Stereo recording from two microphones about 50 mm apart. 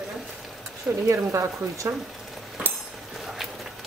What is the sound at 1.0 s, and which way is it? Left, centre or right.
Speech, right.